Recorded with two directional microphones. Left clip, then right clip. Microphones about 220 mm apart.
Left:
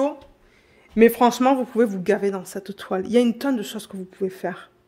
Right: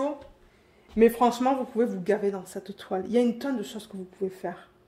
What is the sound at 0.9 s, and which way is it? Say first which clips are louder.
A man's voice: left 5 dB; 45° left (ahead or behind).